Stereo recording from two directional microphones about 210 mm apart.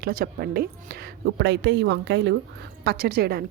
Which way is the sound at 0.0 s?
45° right (ahead or behind).